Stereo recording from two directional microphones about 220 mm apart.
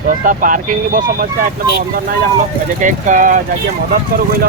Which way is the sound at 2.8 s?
35° right (ahead or behind).